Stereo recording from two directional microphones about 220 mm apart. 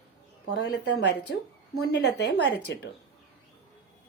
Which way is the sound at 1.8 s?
50° left (ahead or behind).